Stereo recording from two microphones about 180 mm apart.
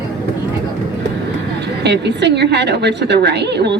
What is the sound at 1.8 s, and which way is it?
A woman's voice, 70° right (ahead or behind).